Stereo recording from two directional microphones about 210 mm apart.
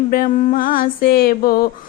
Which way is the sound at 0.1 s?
45° left (ahead or behind).